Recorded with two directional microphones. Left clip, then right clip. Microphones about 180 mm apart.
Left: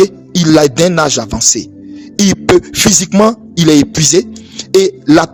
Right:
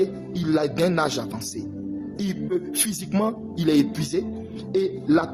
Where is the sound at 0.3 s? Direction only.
65° left (ahead or behind).